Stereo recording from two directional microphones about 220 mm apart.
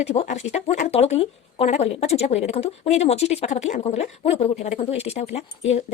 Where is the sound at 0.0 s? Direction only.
30° left (ahead or behind).